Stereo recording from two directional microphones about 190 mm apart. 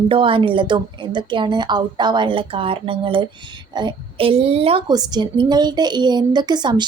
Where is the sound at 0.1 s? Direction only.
25° right (ahead or behind).